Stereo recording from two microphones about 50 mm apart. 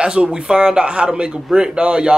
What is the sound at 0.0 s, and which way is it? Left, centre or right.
Speech, centre.